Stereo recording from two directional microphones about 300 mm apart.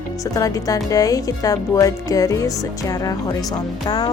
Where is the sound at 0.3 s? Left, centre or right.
Centre.